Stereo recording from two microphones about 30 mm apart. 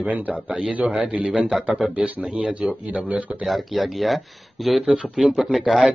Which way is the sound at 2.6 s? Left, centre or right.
Right.